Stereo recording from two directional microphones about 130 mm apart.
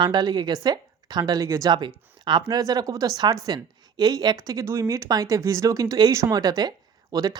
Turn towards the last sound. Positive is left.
turn(degrees=-30)  # may be behind; listen again after turning